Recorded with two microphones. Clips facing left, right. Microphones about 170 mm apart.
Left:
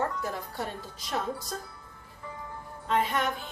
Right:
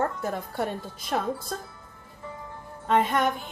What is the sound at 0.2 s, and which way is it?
Speech, 55° right (ahead or behind).